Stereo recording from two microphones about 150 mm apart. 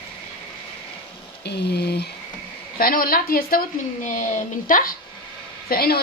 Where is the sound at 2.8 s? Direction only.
75° left (ahead or behind).